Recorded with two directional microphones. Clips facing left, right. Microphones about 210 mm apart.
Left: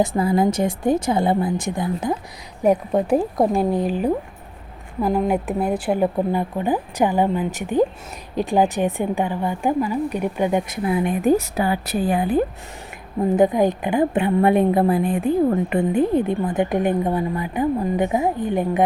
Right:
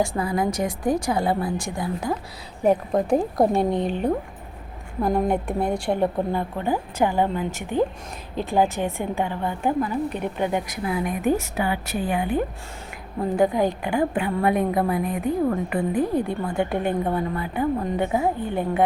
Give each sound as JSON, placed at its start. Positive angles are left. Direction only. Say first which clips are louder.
{"t": 0.0, "sound": "a woman's voice", "louder": "left 5 dB", "side_deg": 25}
{"t": 2.6, "sound": "a woman's voice", "louder": "left 2 dB", "side_deg": 5}
{"t": 13.3, "sound": "a woman's voice", "louder": "left 3 dB", "side_deg": 20}